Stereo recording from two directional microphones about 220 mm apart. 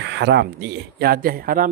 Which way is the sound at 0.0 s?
50° right (ahead or behind).